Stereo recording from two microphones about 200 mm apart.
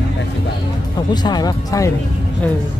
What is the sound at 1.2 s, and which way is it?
Speech, 20° left (ahead or behind).